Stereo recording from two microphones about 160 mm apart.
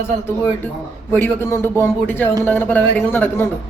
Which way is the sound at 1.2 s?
15° left (ahead or behind).